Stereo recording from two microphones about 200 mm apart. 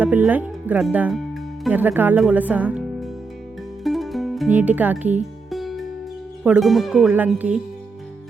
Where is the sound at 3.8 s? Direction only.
Centre (ahead or behind).